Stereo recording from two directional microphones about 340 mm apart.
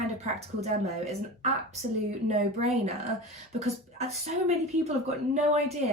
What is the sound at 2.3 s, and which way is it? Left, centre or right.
A woman's voice, centre.